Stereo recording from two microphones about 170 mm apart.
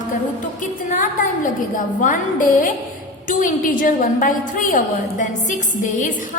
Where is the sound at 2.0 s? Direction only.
50° left (ahead or behind).